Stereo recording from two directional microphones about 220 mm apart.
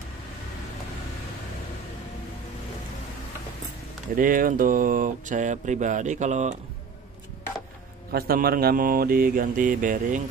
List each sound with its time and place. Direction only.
4.1 s speech: 40° right (ahead or behind)
8.1 s speech: 45° right (ahead or behind)